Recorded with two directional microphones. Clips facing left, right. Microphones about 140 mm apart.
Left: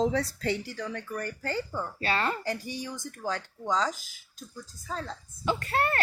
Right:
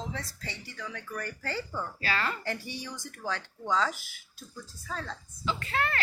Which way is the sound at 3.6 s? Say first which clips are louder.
Even; 15° left (ahead or behind).